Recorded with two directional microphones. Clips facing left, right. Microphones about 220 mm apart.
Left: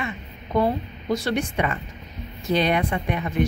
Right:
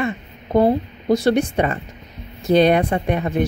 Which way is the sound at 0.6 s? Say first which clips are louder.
Right 6 dB; 30° right (ahead or behind).